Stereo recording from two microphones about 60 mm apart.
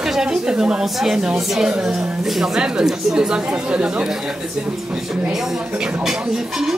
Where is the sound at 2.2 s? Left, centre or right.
Centre.